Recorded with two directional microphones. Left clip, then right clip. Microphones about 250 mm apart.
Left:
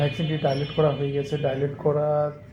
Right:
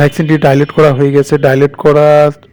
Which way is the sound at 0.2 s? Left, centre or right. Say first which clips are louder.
Right 16 dB; right.